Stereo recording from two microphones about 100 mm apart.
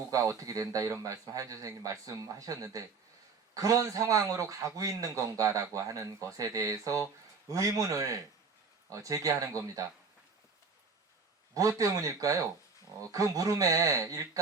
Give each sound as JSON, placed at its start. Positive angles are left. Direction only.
{"t": 0.1, "sound": "speech", "side_deg": -35}
{"t": 11.8, "sound": "speech", "side_deg": -35}